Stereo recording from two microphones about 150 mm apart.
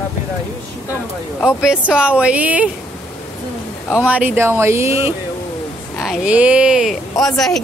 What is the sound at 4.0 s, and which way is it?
Speech, 10° right (ahead or behind).